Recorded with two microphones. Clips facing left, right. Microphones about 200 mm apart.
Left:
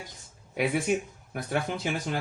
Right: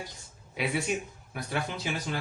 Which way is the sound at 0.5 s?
50° left (ahead or behind).